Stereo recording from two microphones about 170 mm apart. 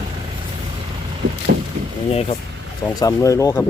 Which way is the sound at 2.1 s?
35° left (ahead or behind).